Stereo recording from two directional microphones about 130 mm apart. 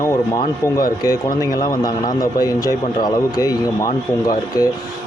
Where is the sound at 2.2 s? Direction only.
25° left (ahead or behind).